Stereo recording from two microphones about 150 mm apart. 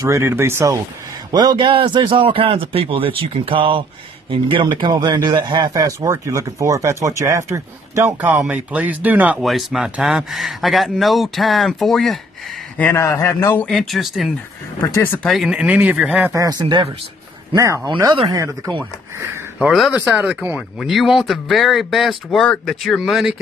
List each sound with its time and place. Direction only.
0.0 s a man's voice: 20° right (ahead or behind)
1.3 s a man's voice: 30° right (ahead or behind); by 9.4 s 10° right (ahead or behind)
9.4 s speech: centre (ahead or behind)
12.7 s a man's voice: 15° left (ahead or behind)
13.7 s speech: centre (ahead or behind)
14.8 s speech: 15° left (ahead or behind)
15.2 s speech: centre (ahead or behind)
16.3 s a man's voice: 25° right (ahead or behind)
19.7 s speech: centre (ahead or behind)